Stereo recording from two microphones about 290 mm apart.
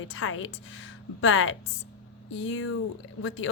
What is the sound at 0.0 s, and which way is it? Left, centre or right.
A woman's voice, left.